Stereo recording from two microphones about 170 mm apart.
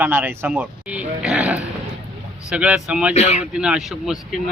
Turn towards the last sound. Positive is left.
turn(degrees=0)  # may be behind; listen again after turning